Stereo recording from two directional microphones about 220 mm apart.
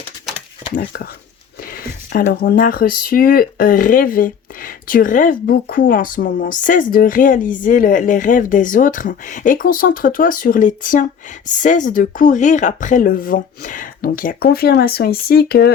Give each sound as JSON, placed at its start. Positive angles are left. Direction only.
{"t": 1.6, "sound": "speech", "side_deg": 40}